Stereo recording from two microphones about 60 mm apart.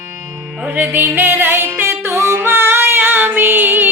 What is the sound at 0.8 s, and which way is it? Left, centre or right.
Music, right.